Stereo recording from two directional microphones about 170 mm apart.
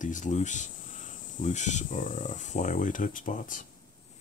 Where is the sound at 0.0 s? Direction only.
45° left (ahead or behind).